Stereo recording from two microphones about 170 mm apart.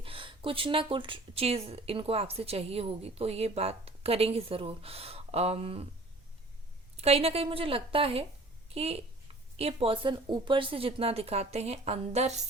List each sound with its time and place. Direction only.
0.0 s speech: 30° right (ahead or behind)
6.9 s a woman's voice: 35° right (ahead or behind)